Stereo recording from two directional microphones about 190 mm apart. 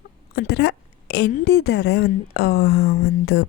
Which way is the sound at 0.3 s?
60° left (ahead or behind).